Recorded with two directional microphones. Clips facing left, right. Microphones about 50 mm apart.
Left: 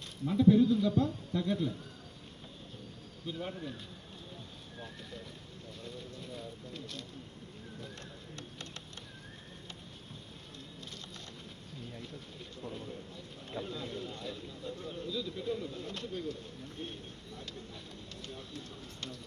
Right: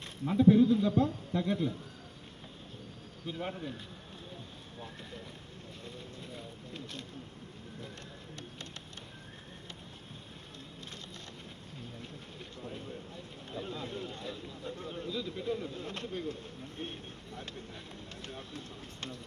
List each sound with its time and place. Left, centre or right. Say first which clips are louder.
0.0 s a man's voice: right 1 dB; right
3.2 s a man's voice: right 1 dB; right
5.8 s speech: left 2 dB; right
13.6 s a man's voice: even; right